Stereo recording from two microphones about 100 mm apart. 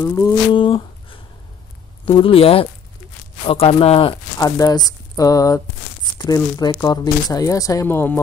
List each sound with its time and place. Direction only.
0.0 s humming: 30° left (ahead or behind)
0.5 s a sound: 55° left (ahead or behind)
2.0 s speech: 65° left (ahead or behind)
4.4 s speech: 35° left (ahead or behind)